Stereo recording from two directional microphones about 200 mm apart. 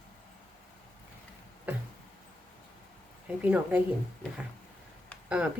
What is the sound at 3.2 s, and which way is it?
Speech, 10° right (ahead or behind).